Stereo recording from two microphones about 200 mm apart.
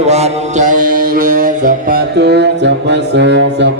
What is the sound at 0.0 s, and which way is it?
Music, 35° right (ahead or behind).